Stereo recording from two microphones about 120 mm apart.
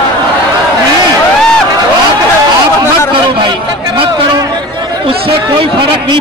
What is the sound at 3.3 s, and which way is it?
A man's voice, 45° right (ahead or behind).